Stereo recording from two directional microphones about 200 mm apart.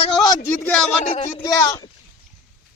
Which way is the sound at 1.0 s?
35° left (ahead or behind).